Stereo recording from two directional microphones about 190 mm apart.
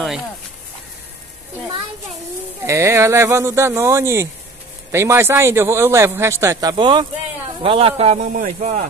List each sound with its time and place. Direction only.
2.6 s a man's voice: 15° right (ahead or behind); by 8.8 s 40° right (ahead or behind)